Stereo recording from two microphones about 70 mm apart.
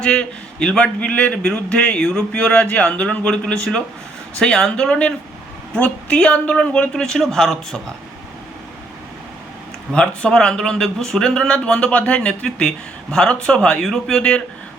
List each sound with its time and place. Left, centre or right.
0.0 s speech: centre
2.4 s a man's voice: left; by 7.8 s centre
9.9 s speech: centre